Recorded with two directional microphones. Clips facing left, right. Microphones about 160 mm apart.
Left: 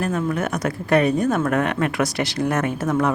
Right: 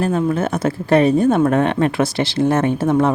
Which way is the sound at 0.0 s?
30° right (ahead or behind).